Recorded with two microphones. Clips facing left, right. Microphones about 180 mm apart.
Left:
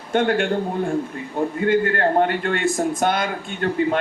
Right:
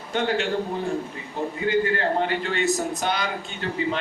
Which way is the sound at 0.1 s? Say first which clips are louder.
Left 5 dB; 50° left (ahead or behind).